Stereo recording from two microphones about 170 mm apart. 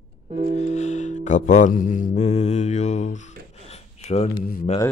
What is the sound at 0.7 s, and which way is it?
Mantra, 45° left (ahead or behind).